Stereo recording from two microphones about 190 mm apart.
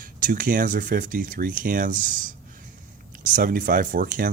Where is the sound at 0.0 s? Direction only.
45° right (ahead or behind).